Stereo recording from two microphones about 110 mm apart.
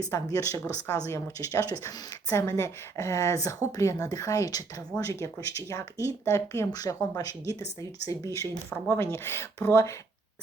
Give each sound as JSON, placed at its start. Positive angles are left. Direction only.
{"t": 0.1, "sound": "speech", "side_deg": 30}